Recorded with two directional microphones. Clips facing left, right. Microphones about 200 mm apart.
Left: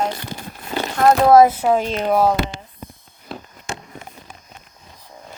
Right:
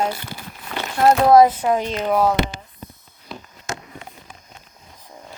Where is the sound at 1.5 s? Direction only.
10° left (ahead or behind).